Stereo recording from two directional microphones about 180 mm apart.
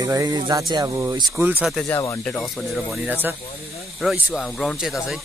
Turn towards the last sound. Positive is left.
turn(degrees=0)  # may be behind; listen again after turning